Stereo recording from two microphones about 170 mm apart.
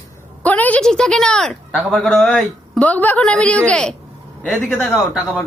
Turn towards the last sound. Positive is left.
turn(degrees=0)  # may be behind; listen again after turning